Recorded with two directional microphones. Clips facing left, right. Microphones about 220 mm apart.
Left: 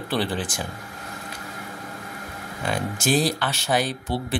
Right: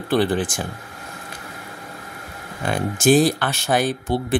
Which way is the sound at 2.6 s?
50° right (ahead or behind).